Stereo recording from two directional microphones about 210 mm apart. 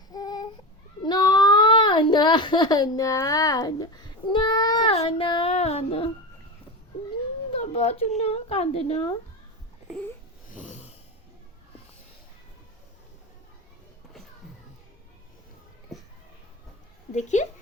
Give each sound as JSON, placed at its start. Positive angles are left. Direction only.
{"t": 0.1, "sound": "a sound", "side_deg": 20}
{"t": 1.0, "sound": "child singing", "side_deg": 20}
{"t": 7.5, "sound": "a woman's voice", "side_deg": 30}
{"t": 10.5, "sound": "snoring", "side_deg": 35}
{"t": 15.9, "sound": "a sound", "side_deg": 0}
{"t": 17.2, "sound": "speech", "side_deg": 35}